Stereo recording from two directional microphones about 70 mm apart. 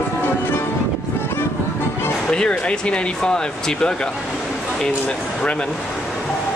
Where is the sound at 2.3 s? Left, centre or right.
Centre.